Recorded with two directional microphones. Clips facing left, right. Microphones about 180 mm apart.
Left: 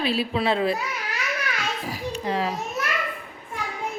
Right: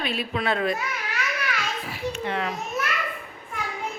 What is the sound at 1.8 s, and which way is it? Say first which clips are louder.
Children playing: left 1 dB; 35° left (ahead or behind).